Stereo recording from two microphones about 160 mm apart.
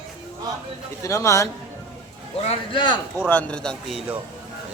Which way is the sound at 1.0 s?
20° left (ahead or behind).